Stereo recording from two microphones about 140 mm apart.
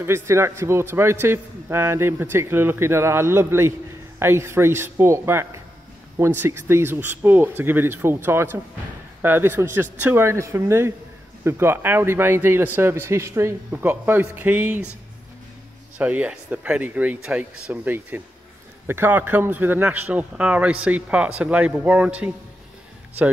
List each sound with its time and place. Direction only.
0.0 s a man's voice: 20° right (ahead or behind)
16.0 s a man's voice: 10° right (ahead or behind)